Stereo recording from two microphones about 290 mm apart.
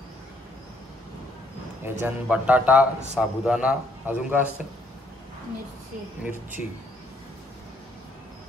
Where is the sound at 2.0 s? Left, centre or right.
Centre.